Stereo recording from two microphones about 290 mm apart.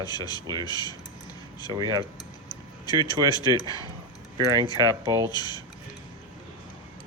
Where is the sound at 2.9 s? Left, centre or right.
Centre.